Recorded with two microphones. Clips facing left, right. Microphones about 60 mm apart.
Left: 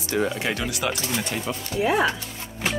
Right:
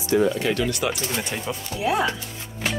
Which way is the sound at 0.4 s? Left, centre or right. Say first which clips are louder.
Right 3 dB; centre.